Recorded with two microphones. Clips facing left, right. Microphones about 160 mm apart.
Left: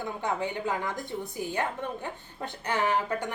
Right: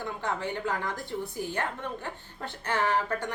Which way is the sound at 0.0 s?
15° left (ahead or behind).